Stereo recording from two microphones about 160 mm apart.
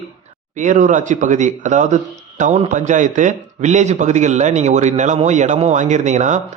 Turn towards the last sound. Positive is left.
turn(degrees=-50)  # may be behind; listen again after turning